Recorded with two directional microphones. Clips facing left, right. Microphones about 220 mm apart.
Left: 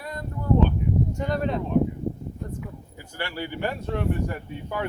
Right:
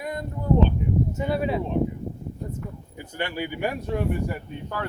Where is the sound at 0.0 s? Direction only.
15° right (ahead or behind).